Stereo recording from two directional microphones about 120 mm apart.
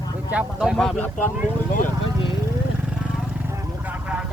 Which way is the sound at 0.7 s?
5° left (ahead or behind).